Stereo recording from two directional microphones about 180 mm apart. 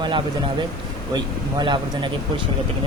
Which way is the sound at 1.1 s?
25° right (ahead or behind).